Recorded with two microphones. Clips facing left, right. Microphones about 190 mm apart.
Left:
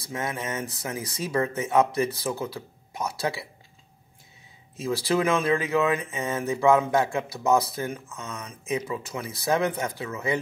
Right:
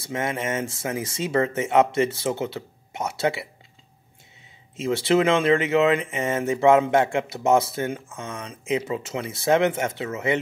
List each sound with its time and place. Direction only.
0.0 s speech: 25° right (ahead or behind)
4.7 s speech: 25° right (ahead or behind)